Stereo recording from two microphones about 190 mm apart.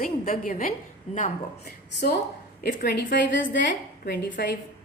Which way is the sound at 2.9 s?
70° left (ahead or behind).